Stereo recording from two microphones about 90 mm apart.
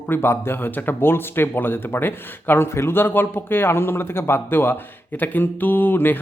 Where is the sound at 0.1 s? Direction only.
25° left (ahead or behind).